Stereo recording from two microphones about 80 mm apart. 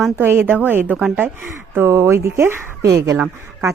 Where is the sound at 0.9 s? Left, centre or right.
Centre.